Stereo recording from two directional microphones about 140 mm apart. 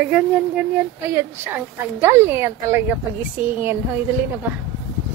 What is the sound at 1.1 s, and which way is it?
A woman's voice, 20° right (ahead or behind).